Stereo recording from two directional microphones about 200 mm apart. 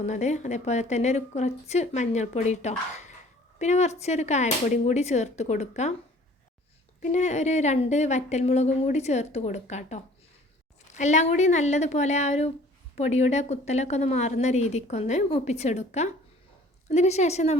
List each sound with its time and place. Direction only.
0.0 s a woman's voice: 35° left (ahead or behind)
7.0 s a woman's voice: 35° left (ahead or behind)